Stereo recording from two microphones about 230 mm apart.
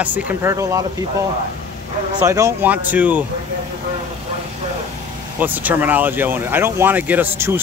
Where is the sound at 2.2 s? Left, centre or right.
Centre.